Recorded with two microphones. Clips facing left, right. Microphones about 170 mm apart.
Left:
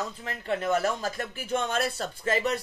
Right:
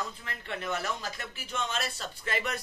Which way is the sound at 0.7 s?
45° left (ahead or behind).